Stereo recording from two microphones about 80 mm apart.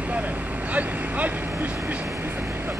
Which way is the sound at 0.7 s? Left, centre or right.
Centre.